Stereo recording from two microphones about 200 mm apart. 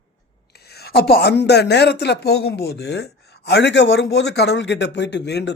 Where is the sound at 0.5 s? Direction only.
55° left (ahead or behind).